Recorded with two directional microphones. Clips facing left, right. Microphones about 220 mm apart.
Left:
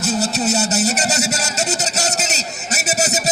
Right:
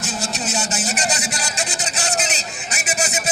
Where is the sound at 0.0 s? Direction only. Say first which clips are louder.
Left 7 dB; 40° left (ahead or behind).